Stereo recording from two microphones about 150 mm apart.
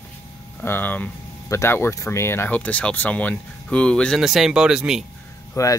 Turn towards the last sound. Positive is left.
turn(degrees=20)  # may be behind; listen again after turning